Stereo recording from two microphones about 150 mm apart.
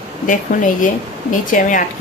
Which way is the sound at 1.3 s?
60° left (ahead or behind).